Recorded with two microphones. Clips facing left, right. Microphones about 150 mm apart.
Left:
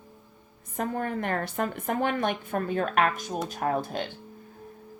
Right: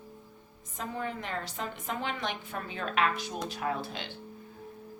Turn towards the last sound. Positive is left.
turn(degrees=50)  # may be behind; listen again after turning